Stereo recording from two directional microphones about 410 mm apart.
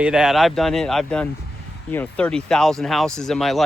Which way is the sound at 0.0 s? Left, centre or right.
Centre.